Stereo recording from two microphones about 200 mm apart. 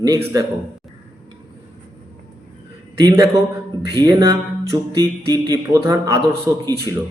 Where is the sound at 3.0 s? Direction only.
20° right (ahead or behind).